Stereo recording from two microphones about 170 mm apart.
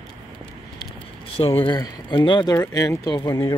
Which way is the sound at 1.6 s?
25° left (ahead or behind).